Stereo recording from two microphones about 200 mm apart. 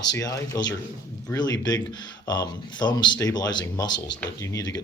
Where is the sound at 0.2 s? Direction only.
15° left (ahead or behind).